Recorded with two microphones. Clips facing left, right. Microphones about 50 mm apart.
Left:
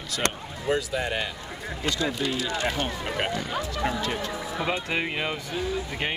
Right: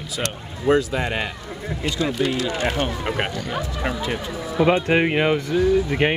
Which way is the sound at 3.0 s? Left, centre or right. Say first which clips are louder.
Right 4 dB; right.